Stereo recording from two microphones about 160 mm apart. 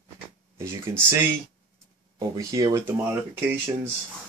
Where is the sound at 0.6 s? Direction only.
15° right (ahead or behind).